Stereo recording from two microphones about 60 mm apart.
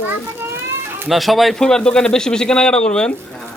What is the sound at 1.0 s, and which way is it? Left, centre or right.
Speech, centre.